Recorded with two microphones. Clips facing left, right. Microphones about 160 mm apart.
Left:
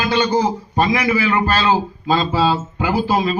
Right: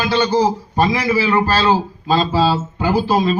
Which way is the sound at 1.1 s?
35° right (ahead or behind).